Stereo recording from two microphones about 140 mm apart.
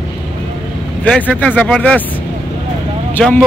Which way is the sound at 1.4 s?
10° left (ahead or behind).